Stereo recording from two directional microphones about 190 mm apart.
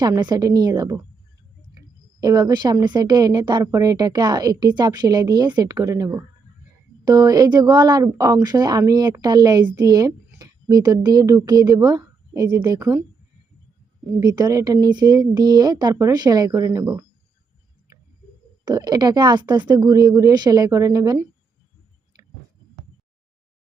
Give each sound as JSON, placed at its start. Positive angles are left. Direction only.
{"t": 0.0, "sound": "a woman's voice", "side_deg": -20}
{"t": 2.2, "sound": "a woman's voice", "side_deg": -20}
{"t": 14.2, "sound": "a woman's voice", "side_deg": -20}
{"t": 18.6, "sound": "a woman's voice", "side_deg": -20}